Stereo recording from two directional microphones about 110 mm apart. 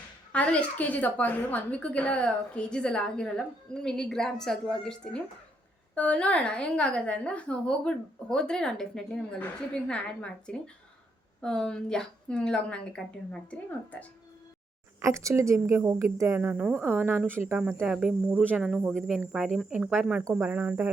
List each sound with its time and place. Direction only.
0.3 s a woman's voice: 15° left (ahead or behind)
15.0 s speech: 30° right (ahead or behind)
17.8 s speech: 5° right (ahead or behind)